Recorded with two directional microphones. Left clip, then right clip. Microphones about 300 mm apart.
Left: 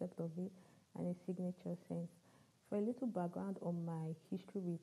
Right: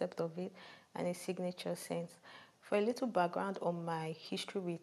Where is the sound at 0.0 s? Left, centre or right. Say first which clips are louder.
Right 8 dB; centre.